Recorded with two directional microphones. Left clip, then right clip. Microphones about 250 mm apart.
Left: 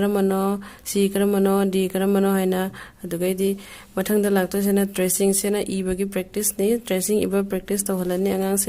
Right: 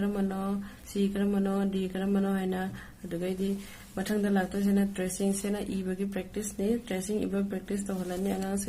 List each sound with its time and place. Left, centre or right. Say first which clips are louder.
0.0 s speech: left 12 dB; left